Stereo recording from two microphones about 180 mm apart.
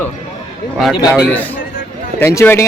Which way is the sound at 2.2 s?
15° left (ahead or behind).